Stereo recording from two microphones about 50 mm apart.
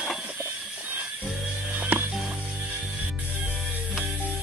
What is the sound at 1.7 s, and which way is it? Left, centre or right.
Music, right.